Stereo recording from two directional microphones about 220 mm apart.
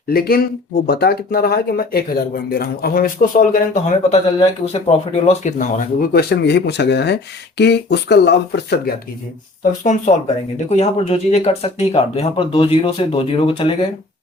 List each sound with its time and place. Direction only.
0.1 s speech: 45° left (ahead or behind)
4.1 s speech: 30° left (ahead or behind); by 8.8 s 50° left (ahead or behind)
9.8 s speech: 35° left (ahead or behind)